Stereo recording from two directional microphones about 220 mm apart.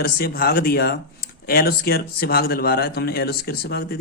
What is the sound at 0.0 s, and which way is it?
Speech, 45° left (ahead or behind).